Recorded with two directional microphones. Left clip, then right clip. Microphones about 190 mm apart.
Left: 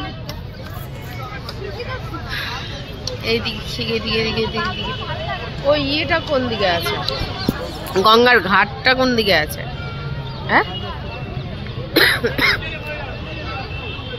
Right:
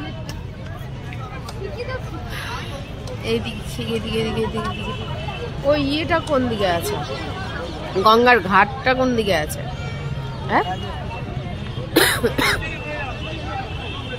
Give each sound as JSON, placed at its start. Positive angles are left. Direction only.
{"t": 3.3, "sound": "speech", "side_deg": -15}
{"t": 5.7, "sound": "speech", "side_deg": -30}
{"t": 8.0, "sound": "speech", "side_deg": -10}
{"t": 10.5, "sound": "speech", "side_deg": -10}
{"t": 11.9, "sound": "cough", "side_deg": -20}